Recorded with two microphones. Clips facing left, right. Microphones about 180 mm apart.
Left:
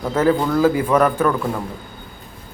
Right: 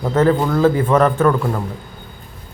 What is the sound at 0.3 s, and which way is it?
Speech, 5° right (ahead or behind).